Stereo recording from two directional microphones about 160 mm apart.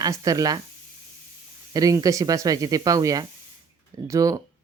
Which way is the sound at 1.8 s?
20° right (ahead or behind).